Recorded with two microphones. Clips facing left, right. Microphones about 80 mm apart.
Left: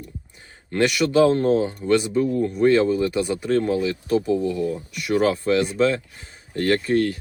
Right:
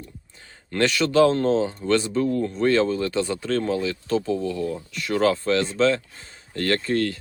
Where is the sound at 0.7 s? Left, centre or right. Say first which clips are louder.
Left 2 dB; centre.